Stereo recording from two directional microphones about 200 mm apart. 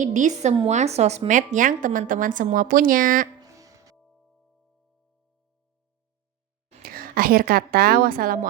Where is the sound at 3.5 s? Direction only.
15° right (ahead or behind).